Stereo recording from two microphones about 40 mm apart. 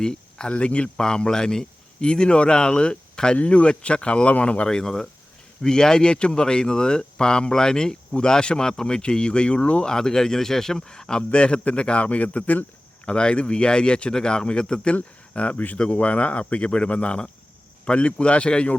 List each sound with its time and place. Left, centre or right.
0.0 s a sound: centre
0.5 s speech: left
0.9 s speech: centre
3.3 s speech: left
4.7 s speech: centre
9.8 s speech: centre
15.3 s speech: left
15.8 s speech: left